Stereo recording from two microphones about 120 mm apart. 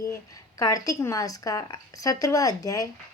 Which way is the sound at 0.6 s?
30° left (ahead or behind).